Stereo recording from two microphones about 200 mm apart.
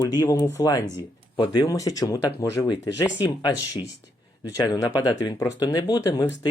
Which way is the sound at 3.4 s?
20° left (ahead or behind).